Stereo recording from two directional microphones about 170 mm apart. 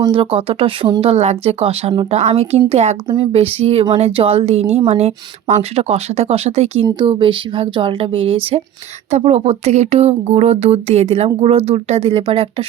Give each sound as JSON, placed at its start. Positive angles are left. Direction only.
{"t": 0.0, "sound": "a woman's voice", "side_deg": -30}